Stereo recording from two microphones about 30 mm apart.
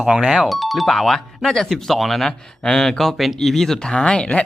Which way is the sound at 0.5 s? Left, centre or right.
Centre.